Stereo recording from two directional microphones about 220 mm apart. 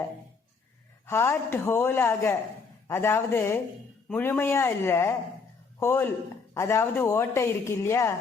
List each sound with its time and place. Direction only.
1.0 s a woman's voice: 10° left (ahead or behind)